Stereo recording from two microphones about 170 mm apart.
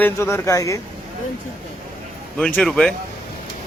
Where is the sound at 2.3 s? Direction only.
5° left (ahead or behind).